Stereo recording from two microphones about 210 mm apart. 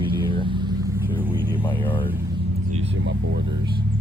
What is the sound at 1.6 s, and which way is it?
Vehicle, 10° left (ahead or behind).